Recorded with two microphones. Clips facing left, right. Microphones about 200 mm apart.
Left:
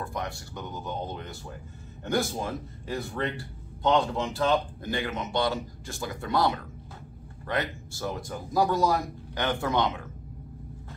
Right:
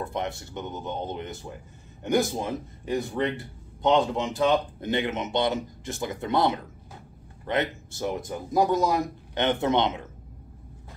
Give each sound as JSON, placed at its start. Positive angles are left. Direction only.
{"t": 0.0, "sound": "speech", "side_deg": -20}